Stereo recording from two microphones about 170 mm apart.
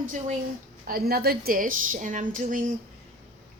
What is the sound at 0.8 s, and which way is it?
A woman's voice, 65° right (ahead or behind).